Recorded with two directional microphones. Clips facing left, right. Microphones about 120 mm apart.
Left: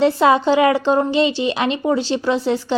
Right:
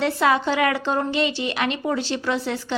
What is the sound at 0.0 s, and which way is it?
Speech, 25° left (ahead or behind).